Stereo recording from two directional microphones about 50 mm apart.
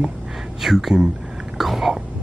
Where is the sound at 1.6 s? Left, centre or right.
Centre.